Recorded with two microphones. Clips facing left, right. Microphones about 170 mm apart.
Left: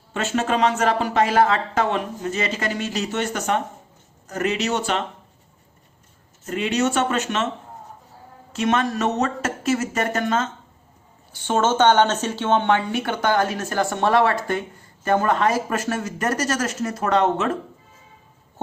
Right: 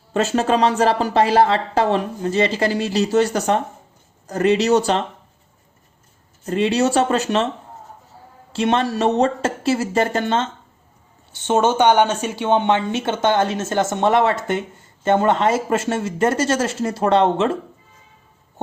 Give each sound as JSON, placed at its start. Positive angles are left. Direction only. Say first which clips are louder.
{"t": 0.1, "sound": "speech", "louder": "right 5 dB", "side_deg": -35}
{"t": 6.4, "sound": "speech", "louder": "right 4 dB", "side_deg": -35}
{"t": 8.5, "sound": "a woman's voice", "louder": "right 2 dB", "side_deg": -30}